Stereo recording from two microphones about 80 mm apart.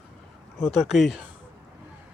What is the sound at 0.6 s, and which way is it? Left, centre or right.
Speech, centre.